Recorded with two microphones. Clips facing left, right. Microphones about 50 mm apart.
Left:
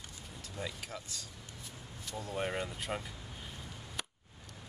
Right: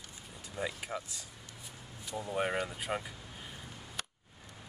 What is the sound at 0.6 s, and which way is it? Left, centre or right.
Speech, centre.